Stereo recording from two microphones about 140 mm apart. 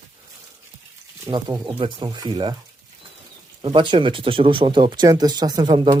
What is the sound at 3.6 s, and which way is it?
Speech, 35° right (ahead or behind).